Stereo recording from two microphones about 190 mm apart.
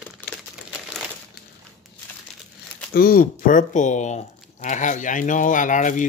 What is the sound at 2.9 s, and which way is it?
Speech, 50° left (ahead or behind).